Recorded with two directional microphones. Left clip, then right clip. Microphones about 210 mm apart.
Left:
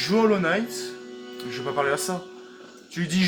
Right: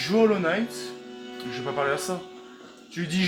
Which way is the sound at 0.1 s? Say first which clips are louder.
Even; 35° left (ahead or behind).